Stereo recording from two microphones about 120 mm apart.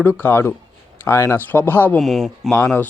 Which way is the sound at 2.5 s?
20° left (ahead or behind).